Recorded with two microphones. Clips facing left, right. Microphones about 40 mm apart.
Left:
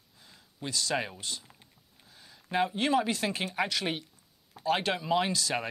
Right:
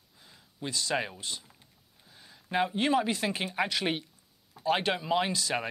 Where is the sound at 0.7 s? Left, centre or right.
Centre.